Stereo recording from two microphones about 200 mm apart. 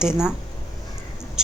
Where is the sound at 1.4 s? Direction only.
5° right (ahead or behind).